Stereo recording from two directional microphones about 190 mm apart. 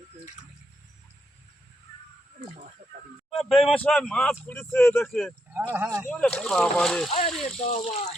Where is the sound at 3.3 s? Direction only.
Centre (ahead or behind).